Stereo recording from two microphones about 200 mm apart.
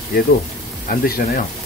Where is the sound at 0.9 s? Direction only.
50° left (ahead or behind).